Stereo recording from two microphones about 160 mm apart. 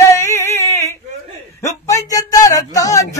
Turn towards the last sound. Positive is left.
turn(degrees=20)  # may be behind; listen again after turning